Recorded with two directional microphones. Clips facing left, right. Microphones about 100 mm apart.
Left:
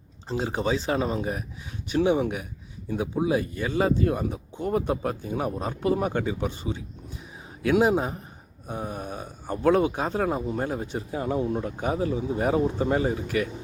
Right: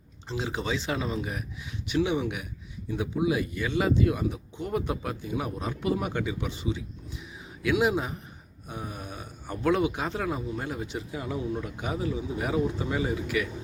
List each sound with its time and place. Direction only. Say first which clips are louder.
0.3 s speech: left 5 dB; 40° left (ahead or behind)